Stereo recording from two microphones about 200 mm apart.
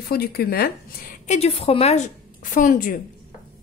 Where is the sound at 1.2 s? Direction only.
30° left (ahead or behind).